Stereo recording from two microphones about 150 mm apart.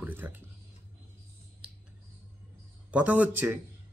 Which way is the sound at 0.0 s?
10° right (ahead or behind).